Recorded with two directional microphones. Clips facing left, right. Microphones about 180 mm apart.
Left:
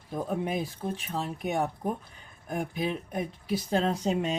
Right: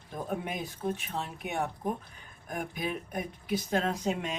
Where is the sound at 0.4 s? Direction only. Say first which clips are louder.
Left 3 dB; 35° left (ahead or behind).